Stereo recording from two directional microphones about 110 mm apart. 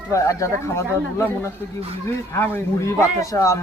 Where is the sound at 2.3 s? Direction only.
20° left (ahead or behind).